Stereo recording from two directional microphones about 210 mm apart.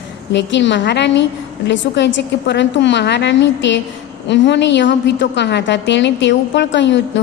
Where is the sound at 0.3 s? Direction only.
60° left (ahead or behind).